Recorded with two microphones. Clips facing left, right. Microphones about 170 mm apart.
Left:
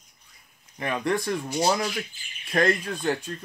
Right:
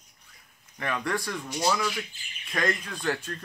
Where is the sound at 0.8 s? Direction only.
20° left (ahead or behind).